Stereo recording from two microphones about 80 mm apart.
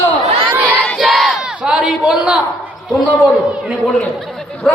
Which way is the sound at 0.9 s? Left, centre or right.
Centre.